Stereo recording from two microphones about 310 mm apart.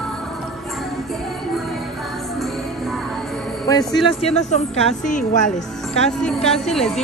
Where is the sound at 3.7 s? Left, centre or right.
Centre.